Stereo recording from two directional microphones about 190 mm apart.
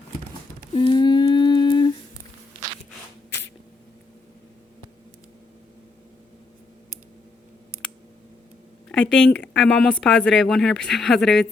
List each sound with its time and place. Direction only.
0.8 s humming: 25° left (ahead or behind)
8.9 s speech: 5° left (ahead or behind)